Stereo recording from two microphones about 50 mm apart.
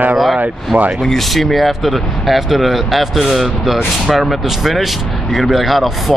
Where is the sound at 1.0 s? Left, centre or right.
Centre.